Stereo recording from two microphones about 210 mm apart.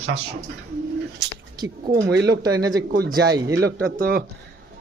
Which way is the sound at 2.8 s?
45° right (ahead or behind).